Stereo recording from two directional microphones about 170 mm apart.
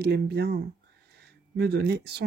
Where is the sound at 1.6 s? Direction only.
75° right (ahead or behind).